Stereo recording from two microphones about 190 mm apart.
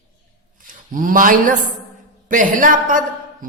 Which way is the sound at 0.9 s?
45° right (ahead or behind).